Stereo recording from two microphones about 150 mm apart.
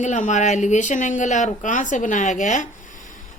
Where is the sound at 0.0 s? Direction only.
55° left (ahead or behind).